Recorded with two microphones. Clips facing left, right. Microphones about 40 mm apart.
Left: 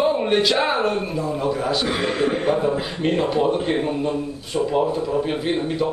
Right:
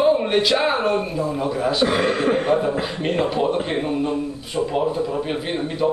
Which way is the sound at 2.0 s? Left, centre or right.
Right.